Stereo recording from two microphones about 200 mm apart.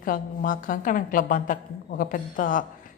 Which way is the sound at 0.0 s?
45° left (ahead or behind).